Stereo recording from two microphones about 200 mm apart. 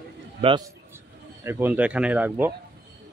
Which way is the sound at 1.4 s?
10° right (ahead or behind).